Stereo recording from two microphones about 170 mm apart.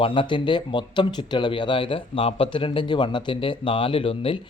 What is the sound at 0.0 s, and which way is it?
Speech, 30° left (ahead or behind).